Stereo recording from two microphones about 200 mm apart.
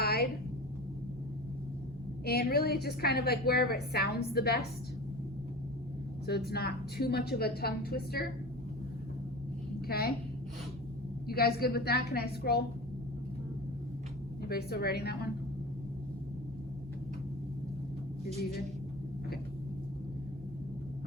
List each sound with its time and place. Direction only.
0.0 s a sound: 50° left (ahead or behind)
2.2 s a woman's voice: 50° left (ahead or behind)
6.2 s a woman's voice: 55° left (ahead or behind)
9.8 s a woman's voice: 50° left (ahead or behind)
11.3 s a woman's voice: 50° left (ahead or behind)
14.4 s a woman's voice: 50° left (ahead or behind)